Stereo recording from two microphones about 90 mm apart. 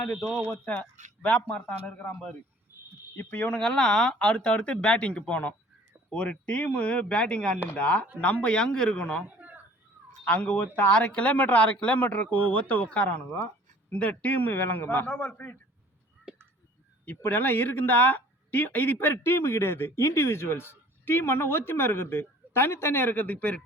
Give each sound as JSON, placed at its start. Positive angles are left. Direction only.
{"t": 0.2, "sound": "speech", "side_deg": 0}
{"t": 0.4, "sound": "speech", "side_deg": 20}
{"t": 3.2, "sound": "speech", "side_deg": 20}
{"t": 9.2, "sound": "a sound", "side_deg": -15}
{"t": 10.2, "sound": "speech", "side_deg": 15}
{"t": 16.3, "sound": "a sound", "side_deg": -5}
{"t": 17.1, "sound": "speech", "side_deg": 20}